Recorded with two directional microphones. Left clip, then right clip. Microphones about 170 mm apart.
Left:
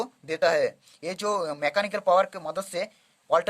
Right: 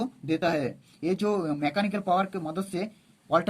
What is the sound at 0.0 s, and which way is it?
Speech, 55° left (ahead or behind).